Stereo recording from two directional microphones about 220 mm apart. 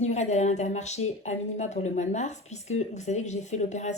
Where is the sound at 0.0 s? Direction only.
30° left (ahead or behind).